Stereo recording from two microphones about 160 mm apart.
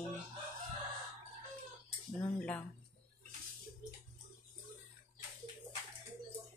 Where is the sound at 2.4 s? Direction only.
10° left (ahead or behind).